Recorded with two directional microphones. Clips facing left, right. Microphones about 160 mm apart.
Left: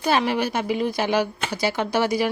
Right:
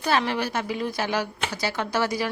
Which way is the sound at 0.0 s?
15° left (ahead or behind).